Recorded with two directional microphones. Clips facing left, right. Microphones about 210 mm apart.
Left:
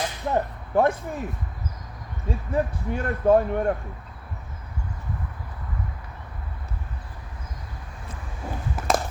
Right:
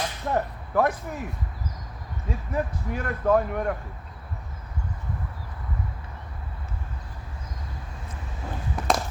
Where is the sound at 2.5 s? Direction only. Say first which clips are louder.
Left 3 dB; 30° left (ahead or behind).